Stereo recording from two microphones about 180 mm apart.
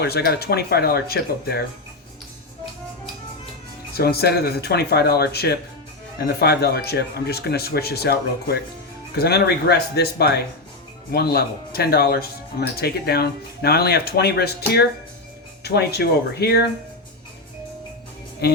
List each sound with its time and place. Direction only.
0.0 s speech: 60° left (ahead or behind)
3.9 s speech: 60° left (ahead or behind)
15.6 s speech: 65° left (ahead or behind)
18.4 s speech: 65° left (ahead or behind)